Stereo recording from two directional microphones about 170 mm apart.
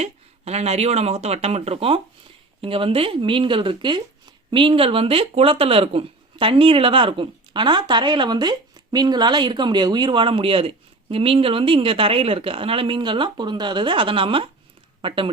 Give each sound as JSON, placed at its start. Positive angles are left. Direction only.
{"t": 0.0, "sound": "speech", "side_deg": -40}